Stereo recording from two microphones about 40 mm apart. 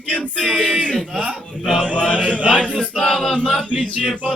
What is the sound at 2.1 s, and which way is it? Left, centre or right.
Chant, right.